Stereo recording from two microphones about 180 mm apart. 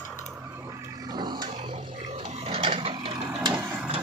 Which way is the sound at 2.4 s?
30° right (ahead or behind).